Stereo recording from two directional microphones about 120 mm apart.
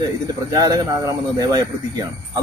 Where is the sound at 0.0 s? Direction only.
30° right (ahead or behind).